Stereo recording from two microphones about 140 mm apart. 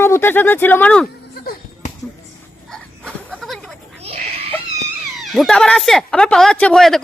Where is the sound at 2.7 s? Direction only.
5° left (ahead or behind).